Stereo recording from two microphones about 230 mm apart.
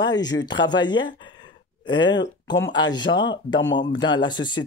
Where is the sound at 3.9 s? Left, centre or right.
Centre.